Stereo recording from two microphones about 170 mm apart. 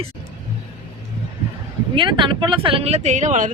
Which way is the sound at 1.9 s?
30° right (ahead or behind).